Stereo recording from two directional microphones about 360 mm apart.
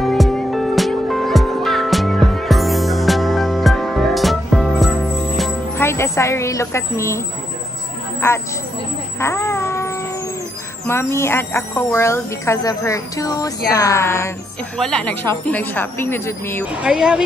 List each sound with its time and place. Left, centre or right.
0.0 s music: centre
5.4 s speech: centre
9.2 s a sound: centre
10.9 s a woman's voice: centre